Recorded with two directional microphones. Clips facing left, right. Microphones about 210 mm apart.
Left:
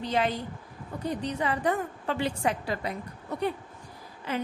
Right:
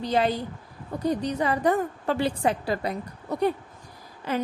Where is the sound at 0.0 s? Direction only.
35° right (ahead or behind).